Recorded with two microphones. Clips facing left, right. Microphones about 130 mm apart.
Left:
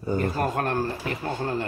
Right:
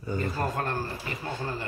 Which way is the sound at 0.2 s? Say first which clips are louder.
Left 2 dB; 60° left (ahead or behind).